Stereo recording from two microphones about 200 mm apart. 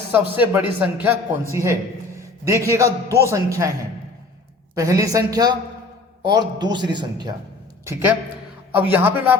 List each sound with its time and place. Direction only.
0.1 s a man's voice: 10° right (ahead or behind)
2.5 s a man's voice: 15° right (ahead or behind)
4.7 s a man's voice: 15° right (ahead or behind)
7.9 s a man's voice: 10° right (ahead or behind)